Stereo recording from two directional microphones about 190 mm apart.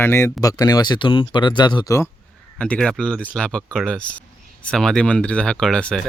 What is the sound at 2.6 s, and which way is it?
Speech, 5° left (ahead or behind).